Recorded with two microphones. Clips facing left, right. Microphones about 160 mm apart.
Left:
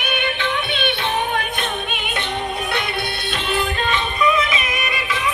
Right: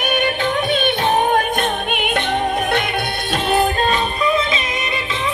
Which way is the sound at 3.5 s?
45° right (ahead or behind).